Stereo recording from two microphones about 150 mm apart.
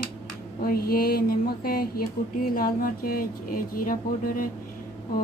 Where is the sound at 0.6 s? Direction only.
85° left; by 4.4 s 65° left (ahead or behind).